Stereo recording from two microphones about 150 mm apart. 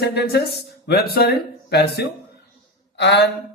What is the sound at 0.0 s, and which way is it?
Speech, 90° left.